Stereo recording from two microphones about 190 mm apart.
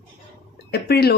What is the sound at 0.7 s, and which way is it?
Speech, 55° left (ahead or behind).